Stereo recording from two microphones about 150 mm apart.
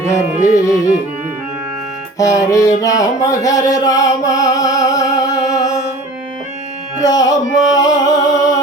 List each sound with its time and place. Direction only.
0.1 s music: 50° left (ahead or behind)
2.1 s music: 20° left (ahead or behind)
5.6 s music: 50° left (ahead or behind)
7.0 s music: 25° left (ahead or behind)
7.8 s a sound: 25° left (ahead or behind)